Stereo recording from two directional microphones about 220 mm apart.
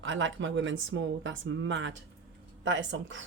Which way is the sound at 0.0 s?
60° right (ahead or behind).